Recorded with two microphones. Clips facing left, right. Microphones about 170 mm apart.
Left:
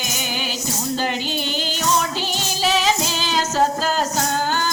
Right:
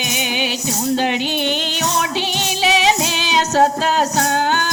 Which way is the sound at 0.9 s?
70° right (ahead or behind).